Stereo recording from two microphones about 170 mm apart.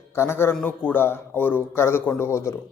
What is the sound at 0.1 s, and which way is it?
A man's voice, 15° left (ahead or behind).